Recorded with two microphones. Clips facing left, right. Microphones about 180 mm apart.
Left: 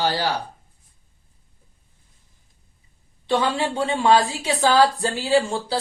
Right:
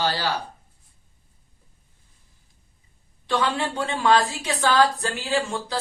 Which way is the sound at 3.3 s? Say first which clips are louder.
Left 3 dB; 25° left (ahead or behind).